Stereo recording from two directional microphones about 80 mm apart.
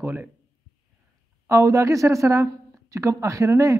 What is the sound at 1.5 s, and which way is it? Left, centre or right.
A man's voice, right.